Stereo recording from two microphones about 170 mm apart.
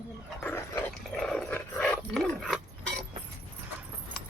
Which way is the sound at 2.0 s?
Centre (ahead or behind).